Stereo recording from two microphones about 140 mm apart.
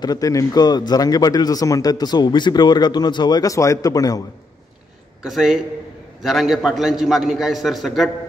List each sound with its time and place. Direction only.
0.0 s a man's voice: 25° left (ahead or behind)
5.2 s a man's voice: centre (ahead or behind)